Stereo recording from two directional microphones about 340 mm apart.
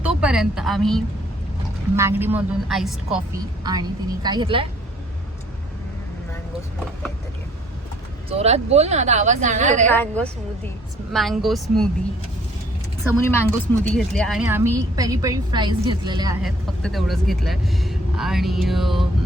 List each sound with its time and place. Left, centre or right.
0.0 s a woman's voice: centre
3.6 s a woman's voice: centre
8.3 s speech: centre
9.9 s speech: centre
13.2 s a woman's voice: centre
16.4 s speech: centre